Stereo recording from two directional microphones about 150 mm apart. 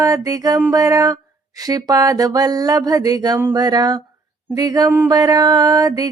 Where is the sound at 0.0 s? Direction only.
25° right (ahead or behind).